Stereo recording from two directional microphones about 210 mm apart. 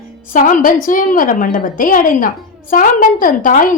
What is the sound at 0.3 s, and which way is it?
A woman's voice, 40° left (ahead or behind).